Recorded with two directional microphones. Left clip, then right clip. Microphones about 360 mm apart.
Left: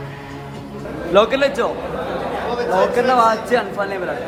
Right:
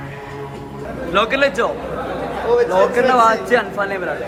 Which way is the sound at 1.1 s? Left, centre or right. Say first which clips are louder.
Left 1 dB; centre.